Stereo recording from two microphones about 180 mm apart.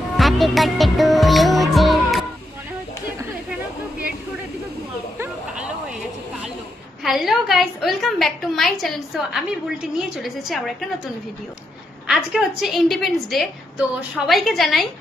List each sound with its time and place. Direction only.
0.2 s music: centre (ahead or behind)
5.1 s a sound: 10° right (ahead or behind)
7.0 s a woman's voice: centre (ahead or behind)
12.1 s a woman's voice: centre (ahead or behind)